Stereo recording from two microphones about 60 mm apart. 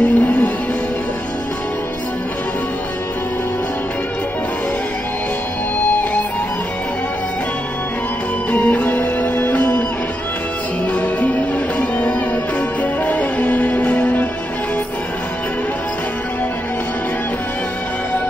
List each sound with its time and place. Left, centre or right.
0.0 s music: left
8.5 s music: left
11.0 s music: left
13.0 s music: left